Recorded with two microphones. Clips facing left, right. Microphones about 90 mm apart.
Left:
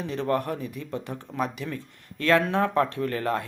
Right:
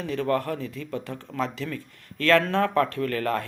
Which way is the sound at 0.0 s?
20° left (ahead or behind).